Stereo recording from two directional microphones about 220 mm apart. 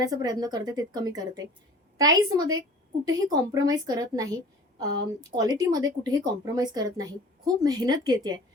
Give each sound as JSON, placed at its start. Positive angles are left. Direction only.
{"t": 0.0, "sound": "a woman's voice", "side_deg": -15}
{"t": 5.3, "sound": "a woman's voice", "side_deg": -20}